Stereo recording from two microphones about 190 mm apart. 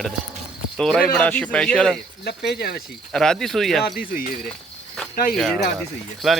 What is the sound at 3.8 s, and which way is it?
Speech, 50° left (ahead or behind).